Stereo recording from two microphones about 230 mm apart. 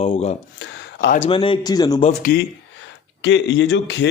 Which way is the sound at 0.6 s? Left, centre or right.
Left.